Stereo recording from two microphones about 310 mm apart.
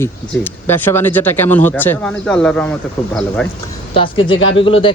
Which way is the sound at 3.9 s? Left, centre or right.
Centre.